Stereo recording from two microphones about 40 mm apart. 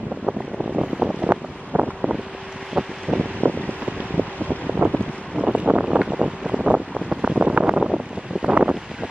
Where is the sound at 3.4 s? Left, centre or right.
Right.